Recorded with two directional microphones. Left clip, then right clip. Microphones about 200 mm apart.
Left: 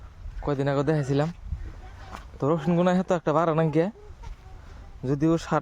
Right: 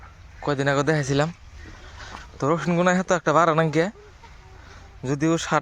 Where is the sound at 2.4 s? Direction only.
15° left (ahead or behind).